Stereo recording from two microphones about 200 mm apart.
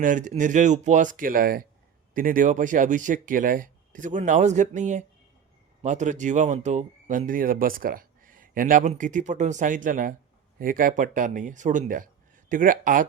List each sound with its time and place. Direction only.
0.0 s speech: 40° right (ahead or behind)